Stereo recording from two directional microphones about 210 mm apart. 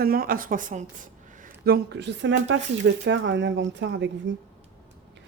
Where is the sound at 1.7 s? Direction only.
55° right (ahead or behind).